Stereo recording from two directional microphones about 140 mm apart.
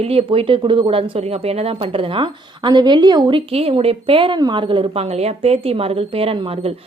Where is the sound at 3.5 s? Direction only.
45° right (ahead or behind).